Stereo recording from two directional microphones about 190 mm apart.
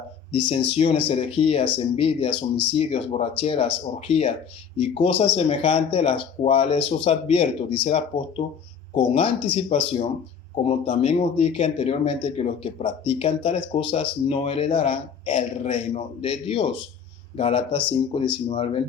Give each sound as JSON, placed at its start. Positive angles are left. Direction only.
{"t": 0.8, "sound": "speech", "side_deg": 30}